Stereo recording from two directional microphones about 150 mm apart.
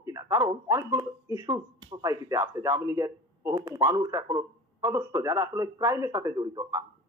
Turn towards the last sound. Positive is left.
turn(degrees=-25)  # may be behind; listen again after turning